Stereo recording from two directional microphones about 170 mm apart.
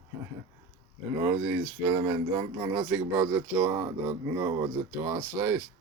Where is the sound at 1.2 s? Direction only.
15° right (ahead or behind).